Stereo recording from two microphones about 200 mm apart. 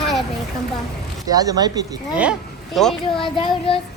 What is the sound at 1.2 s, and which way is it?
Speech, 20° right (ahead or behind).